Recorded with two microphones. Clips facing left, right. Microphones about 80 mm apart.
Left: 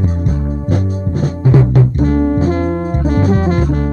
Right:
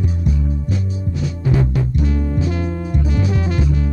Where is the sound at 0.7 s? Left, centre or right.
Left.